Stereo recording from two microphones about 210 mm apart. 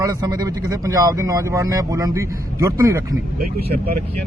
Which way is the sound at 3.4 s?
45° right (ahead or behind).